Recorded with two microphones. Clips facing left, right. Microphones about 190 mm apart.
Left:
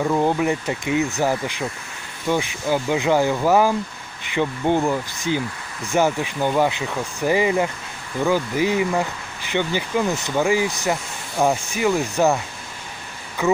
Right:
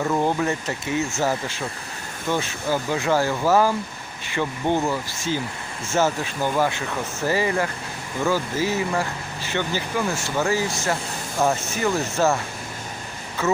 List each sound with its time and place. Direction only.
0.0 s speech: 10° left (ahead or behind)
13.4 s speech: 15° left (ahead or behind)